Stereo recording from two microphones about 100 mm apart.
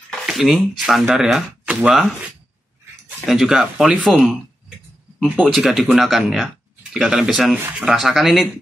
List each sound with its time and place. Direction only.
0.3 s speech: centre (ahead or behind)
3.3 s speech: 5° right (ahead or behind)